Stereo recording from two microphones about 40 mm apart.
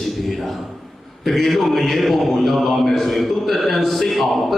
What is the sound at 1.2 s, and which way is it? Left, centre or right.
A man's voice, centre.